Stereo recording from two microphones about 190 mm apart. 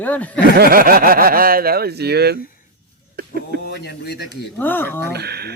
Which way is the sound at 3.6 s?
60° left (ahead or behind).